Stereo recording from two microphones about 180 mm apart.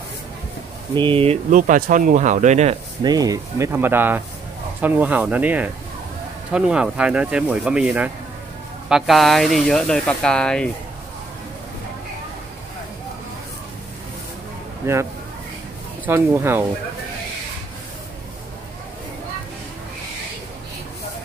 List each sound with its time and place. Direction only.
0.9 s speech: 30° right (ahead or behind)
1.6 s speech: 50° right (ahead or behind)
3.0 s speech: 20° right (ahead or behind); by 10.7 s 5° left (ahead or behind)
14.8 s speech: 15° right (ahead or behind)
16.1 s speech: 15° right (ahead or behind)